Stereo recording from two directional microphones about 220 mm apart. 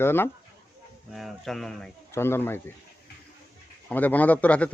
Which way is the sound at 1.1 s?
Centre (ahead or behind).